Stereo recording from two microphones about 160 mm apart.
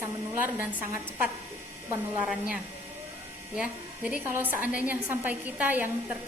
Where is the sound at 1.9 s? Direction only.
10° right (ahead or behind).